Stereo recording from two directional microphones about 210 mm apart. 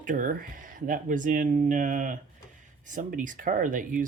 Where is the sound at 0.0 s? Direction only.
40° right (ahead or behind).